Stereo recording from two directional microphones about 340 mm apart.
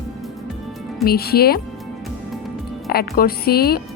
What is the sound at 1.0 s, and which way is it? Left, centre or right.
Speech, left.